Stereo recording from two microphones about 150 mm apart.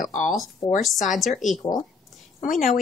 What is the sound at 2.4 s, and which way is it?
Speech, 60° left (ahead or behind).